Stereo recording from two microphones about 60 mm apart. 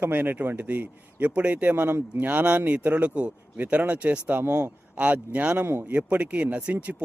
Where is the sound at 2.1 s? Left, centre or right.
Right.